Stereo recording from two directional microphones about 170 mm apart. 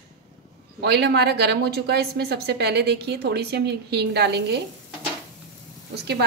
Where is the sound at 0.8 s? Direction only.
75° right (ahead or behind).